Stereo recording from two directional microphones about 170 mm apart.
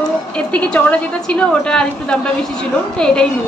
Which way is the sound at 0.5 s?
10° left (ahead or behind).